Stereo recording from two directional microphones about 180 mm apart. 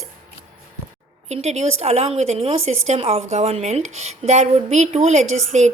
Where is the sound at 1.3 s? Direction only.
40° right (ahead or behind).